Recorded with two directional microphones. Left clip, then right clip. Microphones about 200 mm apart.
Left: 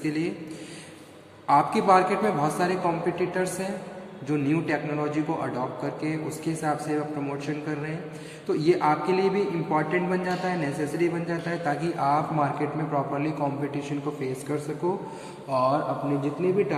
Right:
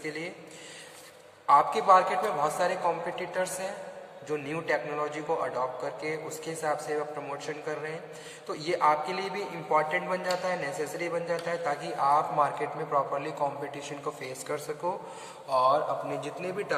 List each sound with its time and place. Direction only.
0.0 s a man's voice: 15° left (ahead or behind)
1.5 s a man's voice: 15° left (ahead or behind)